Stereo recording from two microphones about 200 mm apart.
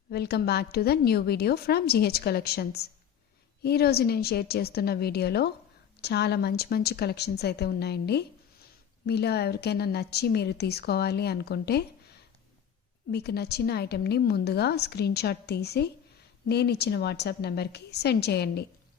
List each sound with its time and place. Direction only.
0.1 s a woman's voice: 55° left (ahead or behind)
13.1 s a woman's voice: 55° left (ahead or behind)